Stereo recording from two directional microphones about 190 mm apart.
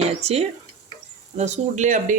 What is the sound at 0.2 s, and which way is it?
Speech, 35° right (ahead or behind).